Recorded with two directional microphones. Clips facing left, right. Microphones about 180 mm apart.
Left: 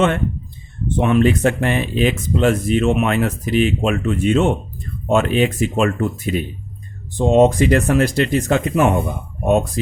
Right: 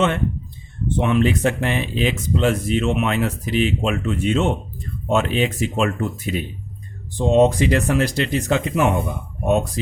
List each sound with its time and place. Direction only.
0.9 s speech: 50° left (ahead or behind)